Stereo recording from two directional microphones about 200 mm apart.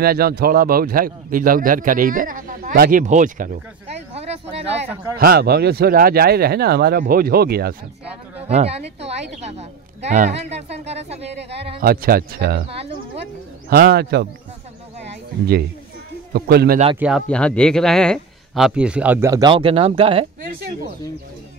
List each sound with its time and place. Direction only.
0.0 s speech: 50° right (ahead or behind); by 4.7 s 30° right (ahead or behind)
5.2 s speech: 50° right (ahead or behind)
8.5 s a woman's voice: 30° right (ahead or behind)
11.8 s speech: 50° right (ahead or behind)
13.7 s speech: 50° right (ahead or behind)
16.3 s speech: 50° right (ahead or behind)
16.9 s speech: 5° right (ahead or behind)
17.3 s speech: 5° left (ahead or behind); by 20.2 s 30° right (ahead or behind)